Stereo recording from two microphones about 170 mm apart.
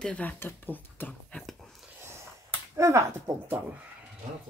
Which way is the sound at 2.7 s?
15° right (ahead or behind).